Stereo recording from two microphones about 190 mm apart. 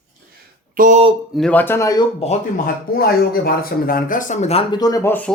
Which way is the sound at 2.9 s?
55° left (ahead or behind).